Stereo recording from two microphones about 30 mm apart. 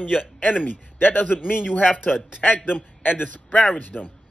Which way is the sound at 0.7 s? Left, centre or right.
Left.